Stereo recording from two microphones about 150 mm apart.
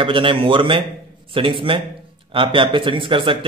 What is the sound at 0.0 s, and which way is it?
A man's voice, 35° right (ahead or behind).